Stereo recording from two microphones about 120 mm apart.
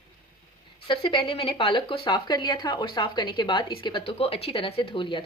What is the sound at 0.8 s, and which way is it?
Speech, 45° left (ahead or behind).